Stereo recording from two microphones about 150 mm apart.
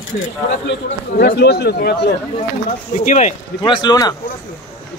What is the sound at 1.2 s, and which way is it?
Speech, 90° left.